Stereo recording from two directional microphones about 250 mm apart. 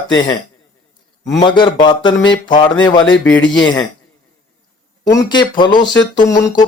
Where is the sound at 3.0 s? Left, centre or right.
Left.